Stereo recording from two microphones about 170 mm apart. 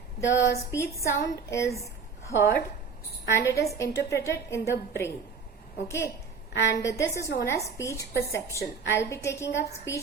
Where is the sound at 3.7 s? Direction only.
20° left (ahead or behind).